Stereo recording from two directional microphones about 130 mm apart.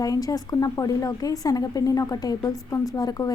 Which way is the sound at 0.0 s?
30° left (ahead or behind).